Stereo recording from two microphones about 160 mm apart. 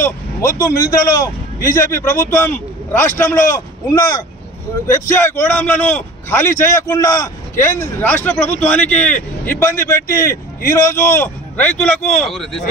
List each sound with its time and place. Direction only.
0.0 s a man's voice: 20° left (ahead or behind)
11.8 s speech: centre (ahead or behind)